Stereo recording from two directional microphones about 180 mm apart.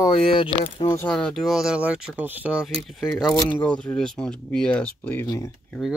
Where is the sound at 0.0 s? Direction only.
25° left (ahead or behind).